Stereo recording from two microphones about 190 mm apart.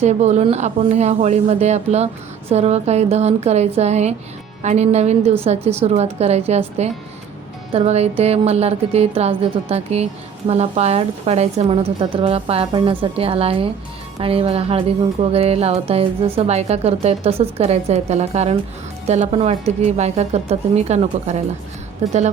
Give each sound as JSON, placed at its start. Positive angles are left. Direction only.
{"t": 0.0, "sound": "a woman's voice", "side_deg": -35}